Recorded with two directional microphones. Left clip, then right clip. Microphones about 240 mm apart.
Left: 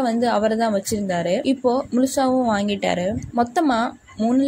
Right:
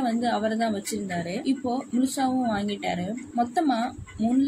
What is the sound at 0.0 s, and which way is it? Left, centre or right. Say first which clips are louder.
A woman's voice: left 6 dB; left.